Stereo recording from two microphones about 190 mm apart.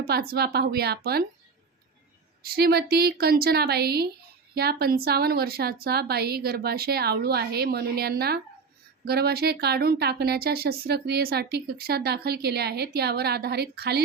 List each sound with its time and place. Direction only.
0.1 s a woman's voice: 55° right (ahead or behind)
2.4 s a woman's voice: 55° right (ahead or behind)